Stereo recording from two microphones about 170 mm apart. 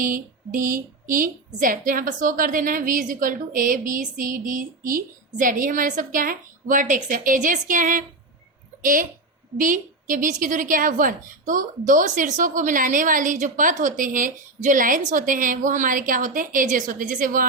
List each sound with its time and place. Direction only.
0.0 s a woman's voice: 50° right (ahead or behind)